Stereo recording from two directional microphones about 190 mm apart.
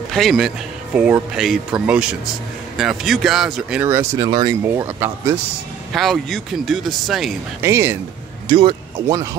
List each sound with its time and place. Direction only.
0.1 s speech: centre (ahead or behind)
4.3 s speech: 25° right (ahead or behind)
4.6 s speech: 10° right (ahead or behind)
5.9 s speech: centre (ahead or behind)
7.6 s speech: 15° right (ahead or behind)
8.5 s speech: 25° right (ahead or behind)